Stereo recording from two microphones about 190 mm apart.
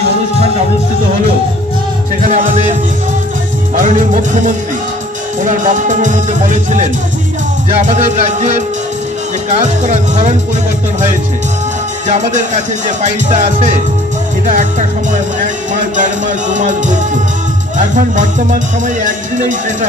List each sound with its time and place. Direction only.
2.2 s music: 40° right (ahead or behind)
3.7 s music: 40° right (ahead or behind)
5.4 s music: 40° right (ahead or behind)
12.1 s music: 40° right (ahead or behind)
16.0 s music: 40° right (ahead or behind)